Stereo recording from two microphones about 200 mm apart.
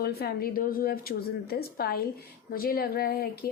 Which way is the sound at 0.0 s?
50° left (ahead or behind).